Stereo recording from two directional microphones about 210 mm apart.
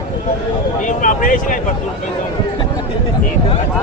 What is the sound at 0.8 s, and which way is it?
Speech, 40° left (ahead or behind).